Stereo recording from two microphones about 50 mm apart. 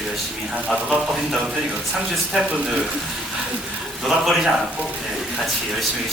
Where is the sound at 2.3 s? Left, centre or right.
Centre.